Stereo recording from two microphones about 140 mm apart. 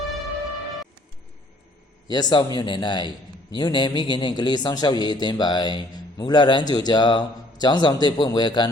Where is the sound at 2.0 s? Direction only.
30° left (ahead or behind).